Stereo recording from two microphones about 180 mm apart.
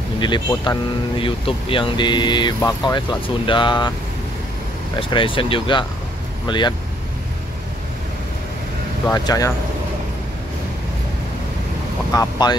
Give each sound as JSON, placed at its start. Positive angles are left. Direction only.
{"t": 0.5, "sound": "speech", "side_deg": 25}
{"t": 5.1, "sound": "speech", "side_deg": 30}
{"t": 9.0, "sound": "speech", "side_deg": 20}
{"t": 12.1, "sound": "speech", "side_deg": 20}